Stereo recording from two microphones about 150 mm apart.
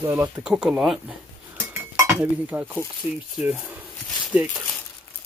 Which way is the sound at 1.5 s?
20° right (ahead or behind).